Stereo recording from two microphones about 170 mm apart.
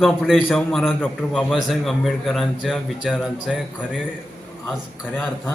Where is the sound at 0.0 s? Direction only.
5° right (ahead or behind).